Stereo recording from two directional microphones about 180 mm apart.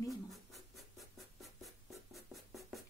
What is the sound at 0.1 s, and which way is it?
Scratch, centre (ahead or behind).